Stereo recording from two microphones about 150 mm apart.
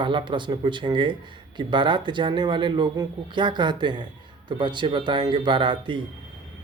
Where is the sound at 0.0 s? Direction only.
30° right (ahead or behind).